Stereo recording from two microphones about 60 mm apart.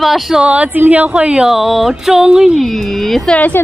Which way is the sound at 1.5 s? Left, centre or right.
Centre.